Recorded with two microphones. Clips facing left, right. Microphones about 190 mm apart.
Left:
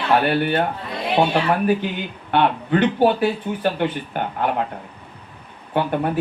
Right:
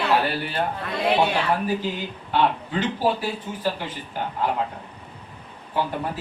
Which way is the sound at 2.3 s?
65° left (ahead or behind).